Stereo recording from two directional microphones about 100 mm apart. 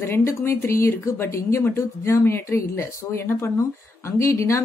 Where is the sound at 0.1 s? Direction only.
25° left (ahead or behind).